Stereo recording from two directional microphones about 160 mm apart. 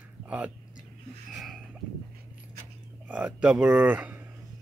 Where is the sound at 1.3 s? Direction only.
Centre (ahead or behind).